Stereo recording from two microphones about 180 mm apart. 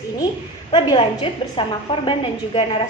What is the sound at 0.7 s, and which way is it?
A woman's voice, 25° left (ahead or behind).